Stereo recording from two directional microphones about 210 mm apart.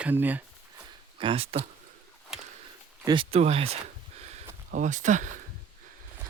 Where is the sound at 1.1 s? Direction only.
25° right (ahead or behind).